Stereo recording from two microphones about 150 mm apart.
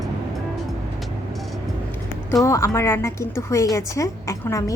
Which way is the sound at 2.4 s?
20° left (ahead or behind).